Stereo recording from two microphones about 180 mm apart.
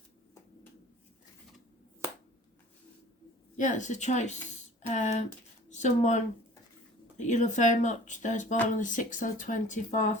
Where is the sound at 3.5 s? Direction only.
45° left (ahead or behind).